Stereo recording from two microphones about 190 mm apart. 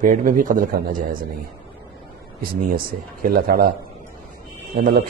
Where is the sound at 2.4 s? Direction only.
50° right (ahead or behind).